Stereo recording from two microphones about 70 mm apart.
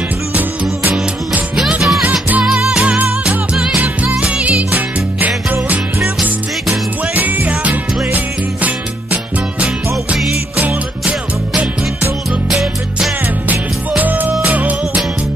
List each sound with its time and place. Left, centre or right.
1.8 s music: centre
3.8 s music: right
12.4 s music: centre
13.5 s music: right